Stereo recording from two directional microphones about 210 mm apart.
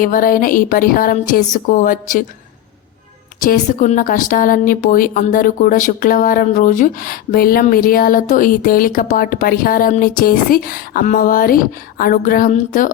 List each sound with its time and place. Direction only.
0.0 s a woman's voice: 40° left (ahead or behind)
3.4 s a woman's voice: 40° left (ahead or behind)